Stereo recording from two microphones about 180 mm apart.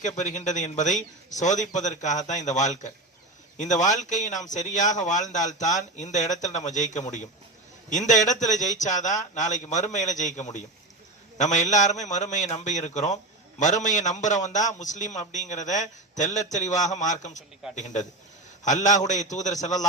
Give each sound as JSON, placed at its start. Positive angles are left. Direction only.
{"t": 0.0, "sound": "a man's voice", "side_deg": 45}